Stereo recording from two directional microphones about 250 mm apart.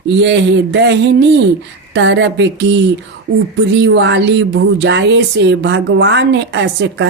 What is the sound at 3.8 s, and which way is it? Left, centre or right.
A woman's voice, right.